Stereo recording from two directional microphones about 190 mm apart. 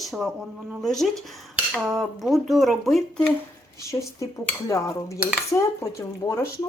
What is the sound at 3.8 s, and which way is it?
Cutlery, 15° left (ahead or behind).